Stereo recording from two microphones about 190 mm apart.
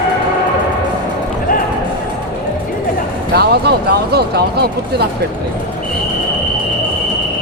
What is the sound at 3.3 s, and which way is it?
Speech, 60° right (ahead or behind).